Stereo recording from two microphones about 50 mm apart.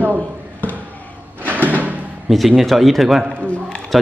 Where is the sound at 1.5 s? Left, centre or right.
Right.